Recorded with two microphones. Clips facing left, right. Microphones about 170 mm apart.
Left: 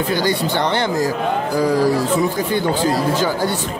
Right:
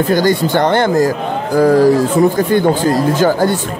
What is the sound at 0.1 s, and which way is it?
Speech, 45° right (ahead or behind).